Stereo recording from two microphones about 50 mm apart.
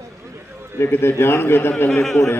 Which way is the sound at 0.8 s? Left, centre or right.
Left.